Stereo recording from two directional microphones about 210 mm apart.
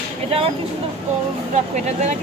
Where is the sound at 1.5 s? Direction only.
35° right (ahead or behind).